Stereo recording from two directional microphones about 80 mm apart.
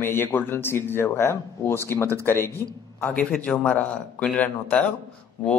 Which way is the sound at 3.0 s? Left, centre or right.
Centre.